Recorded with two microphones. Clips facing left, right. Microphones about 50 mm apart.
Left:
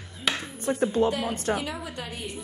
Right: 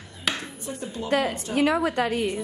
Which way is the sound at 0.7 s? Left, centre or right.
Left.